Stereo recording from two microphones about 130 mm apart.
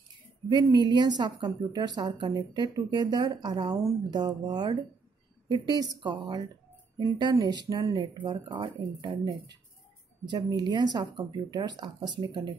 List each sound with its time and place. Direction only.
0.5 s speech: 30° right (ahead or behind)